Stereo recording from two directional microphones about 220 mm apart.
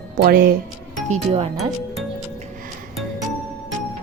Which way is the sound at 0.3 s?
40° right (ahead or behind).